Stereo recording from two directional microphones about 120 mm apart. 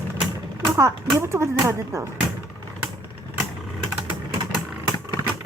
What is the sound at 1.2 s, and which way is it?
Speech, 20° right (ahead or behind).